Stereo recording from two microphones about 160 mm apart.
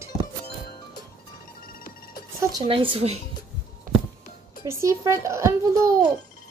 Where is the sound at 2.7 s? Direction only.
35° right (ahead or behind).